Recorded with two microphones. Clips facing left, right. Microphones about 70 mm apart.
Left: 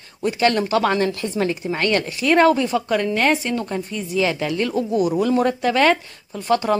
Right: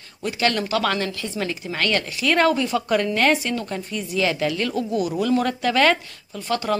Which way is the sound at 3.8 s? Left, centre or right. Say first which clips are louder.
Left 2 dB; centre.